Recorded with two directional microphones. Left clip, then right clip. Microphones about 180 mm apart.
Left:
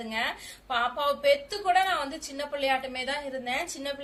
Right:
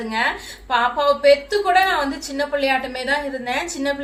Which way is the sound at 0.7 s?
10° left (ahead or behind).